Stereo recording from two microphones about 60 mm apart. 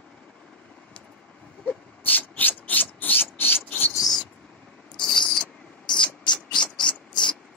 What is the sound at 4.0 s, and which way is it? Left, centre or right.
Rodents, centre.